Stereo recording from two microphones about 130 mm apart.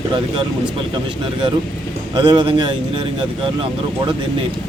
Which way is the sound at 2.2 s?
35° right (ahead or behind).